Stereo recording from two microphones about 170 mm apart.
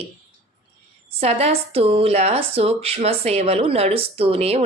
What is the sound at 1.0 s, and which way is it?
A woman's voice, 35° right (ahead or behind).